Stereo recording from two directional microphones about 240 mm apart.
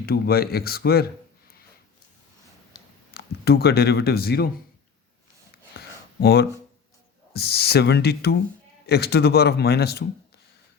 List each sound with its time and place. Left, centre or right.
0.0 s speech: left
3.2 s speech: left
5.7 s a sound: left
7.3 s speech: left